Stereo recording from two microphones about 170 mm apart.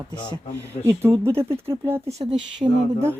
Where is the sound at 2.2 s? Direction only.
30° right (ahead or behind).